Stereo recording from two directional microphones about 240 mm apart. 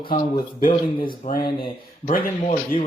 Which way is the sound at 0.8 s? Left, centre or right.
Left.